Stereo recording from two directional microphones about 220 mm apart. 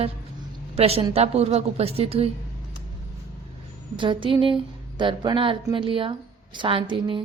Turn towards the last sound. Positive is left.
turn(degrees=-20)  # may be behind; listen again after turning